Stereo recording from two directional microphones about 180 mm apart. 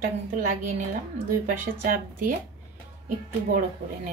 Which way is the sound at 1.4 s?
50° right (ahead or behind).